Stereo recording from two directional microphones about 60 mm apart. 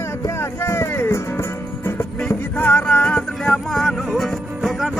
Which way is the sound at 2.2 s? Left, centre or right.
Left.